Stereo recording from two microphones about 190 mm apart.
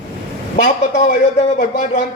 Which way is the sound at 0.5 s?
40° left (ahead or behind).